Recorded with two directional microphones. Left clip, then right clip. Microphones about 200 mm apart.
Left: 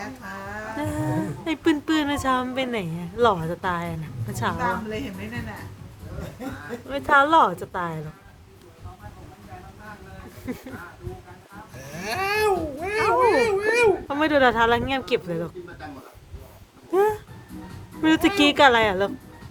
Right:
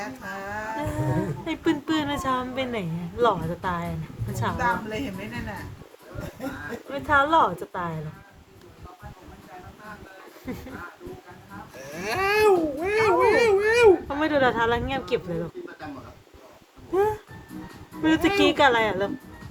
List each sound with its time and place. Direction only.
0.0 s music: 55° right (ahead or behind)
0.8 s a woman's voice: 30° left (ahead or behind)
4.5 s a woman's voice: 55° right (ahead or behind)
6.8 s a woman's voice: 30° left (ahead or behind)
10.5 s a woman's voice: 25° left (ahead or behind)
11.8 s speech: 40° right (ahead or behind)
14.1 s a woman's voice: 25° left (ahead or behind)
16.9 s a woman's voice: 30° left (ahead or behind)